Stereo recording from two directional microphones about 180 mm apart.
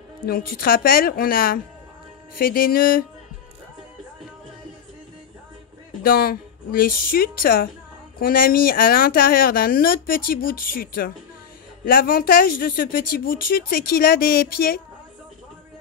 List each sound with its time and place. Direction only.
0.3 s speech: 55° left (ahead or behind)
6.0 s speech: 55° left (ahead or behind)